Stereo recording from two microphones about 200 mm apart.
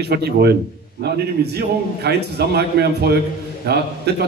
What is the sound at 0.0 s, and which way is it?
A man's voice, 55° right (ahead or behind).